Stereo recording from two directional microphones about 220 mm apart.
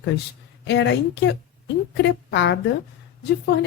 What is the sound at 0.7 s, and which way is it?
A woman's voice, 50° left (ahead or behind).